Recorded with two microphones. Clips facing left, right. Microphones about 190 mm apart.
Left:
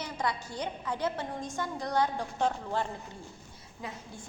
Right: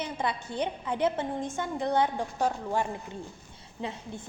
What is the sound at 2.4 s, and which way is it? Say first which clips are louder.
Speech: right 2 dB; 10° right (ahead or behind).